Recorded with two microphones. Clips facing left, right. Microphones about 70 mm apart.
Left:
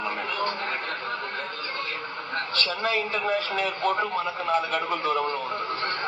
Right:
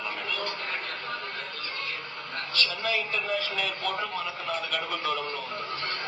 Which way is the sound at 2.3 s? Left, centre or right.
Left.